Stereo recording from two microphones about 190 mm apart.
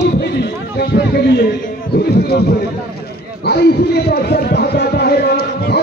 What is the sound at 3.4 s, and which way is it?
Speech, 60° left (ahead or behind).